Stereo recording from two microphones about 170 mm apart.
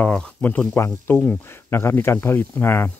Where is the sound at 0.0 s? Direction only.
5° left (ahead or behind).